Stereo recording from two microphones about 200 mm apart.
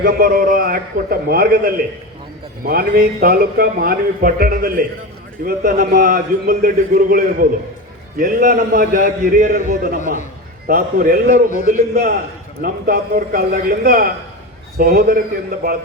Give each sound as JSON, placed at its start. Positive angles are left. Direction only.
{"t": 0.0, "sound": "a man's voice", "side_deg": -50}